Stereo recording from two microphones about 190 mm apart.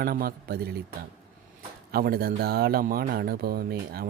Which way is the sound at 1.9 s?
50° right (ahead or behind).